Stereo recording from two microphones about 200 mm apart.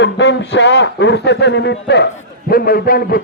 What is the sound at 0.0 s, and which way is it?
A man's voice, 60° left (ahead or behind).